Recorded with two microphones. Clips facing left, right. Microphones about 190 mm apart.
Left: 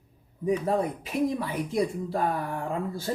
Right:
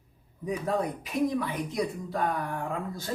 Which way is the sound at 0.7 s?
25° left (ahead or behind).